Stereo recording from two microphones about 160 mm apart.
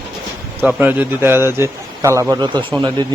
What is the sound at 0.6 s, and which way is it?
A man's voice, 10° right (ahead or behind).